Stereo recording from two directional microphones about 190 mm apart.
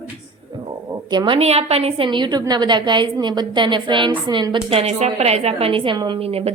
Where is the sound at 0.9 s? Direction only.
25° right (ahead or behind).